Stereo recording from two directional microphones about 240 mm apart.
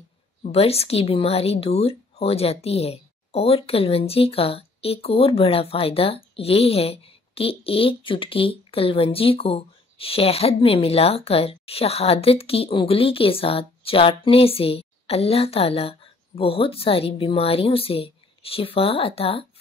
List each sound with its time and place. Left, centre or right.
0.4 s a woman's voice: left